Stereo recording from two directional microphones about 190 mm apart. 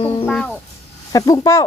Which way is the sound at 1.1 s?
20° left (ahead or behind).